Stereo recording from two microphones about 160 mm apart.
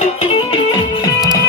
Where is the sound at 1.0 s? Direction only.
20° left (ahead or behind).